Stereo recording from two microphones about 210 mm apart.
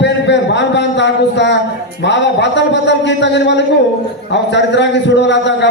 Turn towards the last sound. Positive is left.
turn(degrees=55)  # may be behind; listen again after turning